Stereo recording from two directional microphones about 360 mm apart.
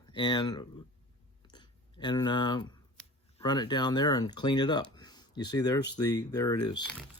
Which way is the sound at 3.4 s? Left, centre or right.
Centre.